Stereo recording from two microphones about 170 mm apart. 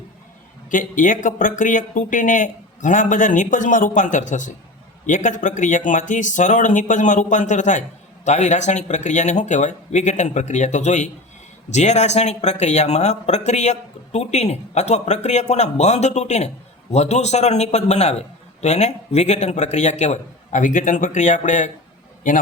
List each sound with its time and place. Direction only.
0.7 s a man's voice: 50° left (ahead or behind)